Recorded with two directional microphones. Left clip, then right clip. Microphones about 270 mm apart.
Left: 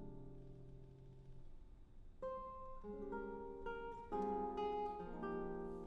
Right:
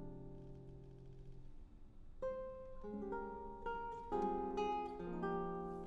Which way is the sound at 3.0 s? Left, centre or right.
Right.